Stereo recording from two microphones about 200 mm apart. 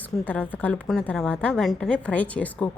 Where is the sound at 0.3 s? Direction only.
10° left (ahead or behind).